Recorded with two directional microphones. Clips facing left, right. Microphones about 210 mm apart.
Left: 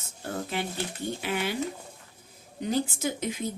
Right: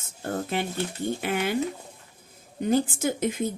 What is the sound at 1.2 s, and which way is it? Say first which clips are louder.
Speech: right 3 dB; 55° right (ahead or behind).